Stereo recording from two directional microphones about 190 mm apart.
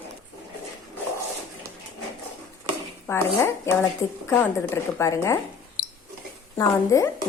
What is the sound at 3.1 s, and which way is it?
Speech, 15° left (ahead or behind).